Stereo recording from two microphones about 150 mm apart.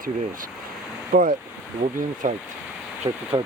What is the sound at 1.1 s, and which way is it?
Speech, 65° right (ahead or behind).